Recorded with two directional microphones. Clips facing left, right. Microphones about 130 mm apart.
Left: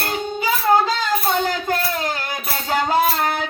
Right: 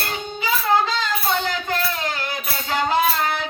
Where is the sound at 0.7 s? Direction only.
45° left (ahead or behind).